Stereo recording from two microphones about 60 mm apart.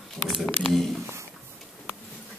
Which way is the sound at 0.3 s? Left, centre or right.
Centre.